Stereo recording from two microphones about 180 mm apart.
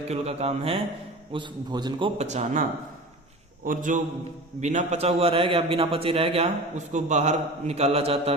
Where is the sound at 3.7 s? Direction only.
45° right (ahead or behind).